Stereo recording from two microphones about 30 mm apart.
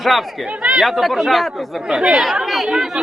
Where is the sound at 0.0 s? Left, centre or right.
Centre.